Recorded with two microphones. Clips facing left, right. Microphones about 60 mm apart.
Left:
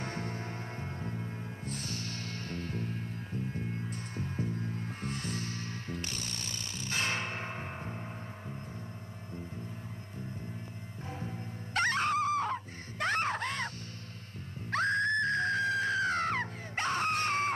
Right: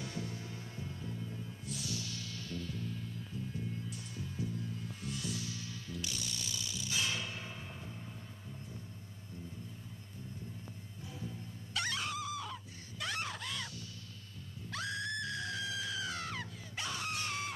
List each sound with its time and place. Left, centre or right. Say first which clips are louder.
0.0 s music: left 5 dB; left
11.1 s music: left 3 dB; left
14.7 s screaming: left 10 dB; left